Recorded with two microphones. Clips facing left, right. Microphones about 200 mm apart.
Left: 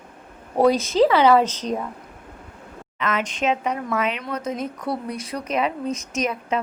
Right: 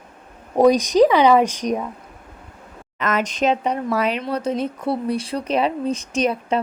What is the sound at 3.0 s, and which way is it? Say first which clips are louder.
Speech: right 3 dB; 40° right (ahead or behind).